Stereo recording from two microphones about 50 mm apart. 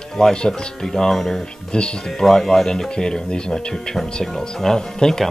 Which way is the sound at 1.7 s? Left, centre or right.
Centre.